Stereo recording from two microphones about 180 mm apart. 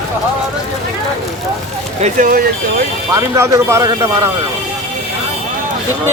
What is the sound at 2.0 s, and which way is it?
Speech, 45° right (ahead or behind).